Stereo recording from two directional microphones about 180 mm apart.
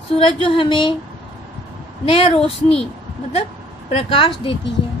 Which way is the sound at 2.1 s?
30° left (ahead or behind).